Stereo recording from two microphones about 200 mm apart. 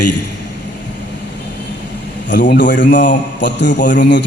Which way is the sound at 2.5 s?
60° left (ahead or behind).